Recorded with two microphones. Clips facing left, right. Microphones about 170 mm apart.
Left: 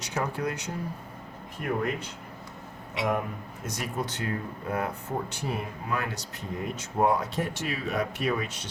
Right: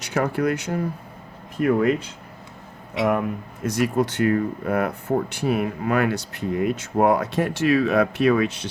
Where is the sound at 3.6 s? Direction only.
90° right.